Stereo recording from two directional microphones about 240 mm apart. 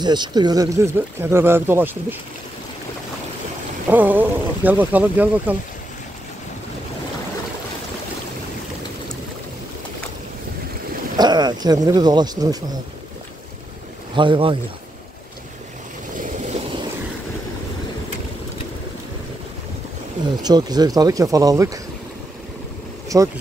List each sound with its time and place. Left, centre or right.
0.0 s speech: centre
3.9 s speech: centre
11.1 s speech: centre
14.1 s speech: centre
16.2 s vehicle: right
20.4 s speech: centre
23.0 s boat: centre